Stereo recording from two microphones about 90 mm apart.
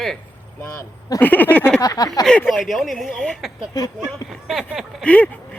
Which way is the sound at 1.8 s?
40° left (ahead or behind).